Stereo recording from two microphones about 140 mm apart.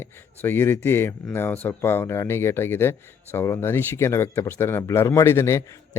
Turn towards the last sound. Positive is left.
turn(degrees=20)  # may be behind; listen again after turning